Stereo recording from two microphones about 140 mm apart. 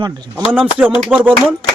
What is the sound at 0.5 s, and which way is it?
Speech, 10° right (ahead or behind).